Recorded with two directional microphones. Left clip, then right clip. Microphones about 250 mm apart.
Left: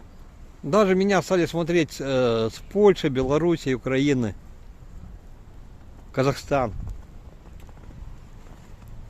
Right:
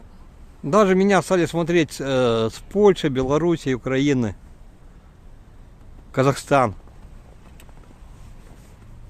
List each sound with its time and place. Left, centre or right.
0.7 s speech: centre
6.1 s speech: centre